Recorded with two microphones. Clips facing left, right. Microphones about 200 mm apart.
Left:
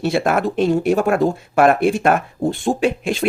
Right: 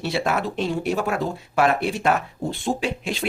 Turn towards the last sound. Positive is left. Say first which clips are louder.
# left 8 dB
turn(degrees=50)  # may be behind; listen again after turning